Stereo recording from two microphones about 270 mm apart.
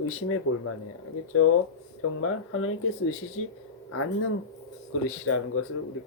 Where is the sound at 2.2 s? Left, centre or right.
Left.